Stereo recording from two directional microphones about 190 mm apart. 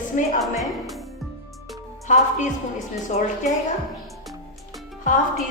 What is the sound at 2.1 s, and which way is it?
Speech, 40° left (ahead or behind).